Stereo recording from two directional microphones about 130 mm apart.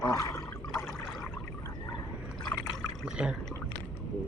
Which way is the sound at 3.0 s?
5° right (ahead or behind).